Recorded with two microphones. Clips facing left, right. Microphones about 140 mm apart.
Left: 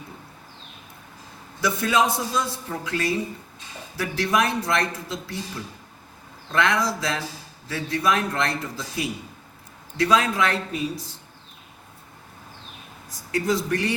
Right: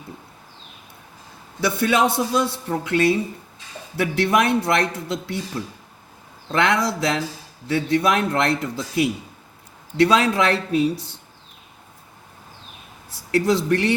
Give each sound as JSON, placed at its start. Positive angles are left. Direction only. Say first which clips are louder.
{"t": 1.6, "sound": "a man's voice", "louder": "right 3 dB", "side_deg": -65}
{"t": 6.5, "sound": "a man's voice", "louder": "right 3 dB", "side_deg": -60}
{"t": 13.3, "sound": "speech", "louder": "right 5 dB", "side_deg": -70}